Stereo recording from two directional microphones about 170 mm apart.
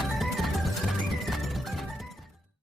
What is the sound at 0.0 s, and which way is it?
Music, centre (ahead or behind).